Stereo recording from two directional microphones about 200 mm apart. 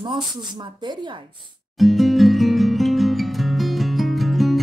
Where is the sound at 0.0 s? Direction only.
20° right (ahead or behind).